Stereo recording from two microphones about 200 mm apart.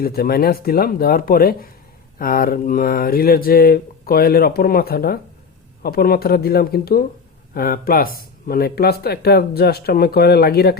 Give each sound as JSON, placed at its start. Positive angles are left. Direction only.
{"t": 0.0, "sound": "speech", "side_deg": 50}